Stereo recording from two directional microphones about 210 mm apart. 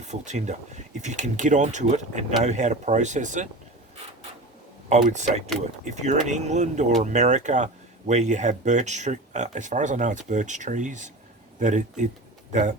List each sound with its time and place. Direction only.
0.0 s speech: 35° right (ahead or behind)
4.9 s speech: 35° right (ahead or behind)